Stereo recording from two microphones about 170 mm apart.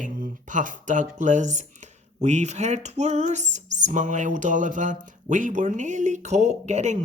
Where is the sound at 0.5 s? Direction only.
50° right (ahead or behind).